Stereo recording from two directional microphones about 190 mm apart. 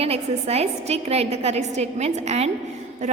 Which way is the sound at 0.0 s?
35° right (ahead or behind).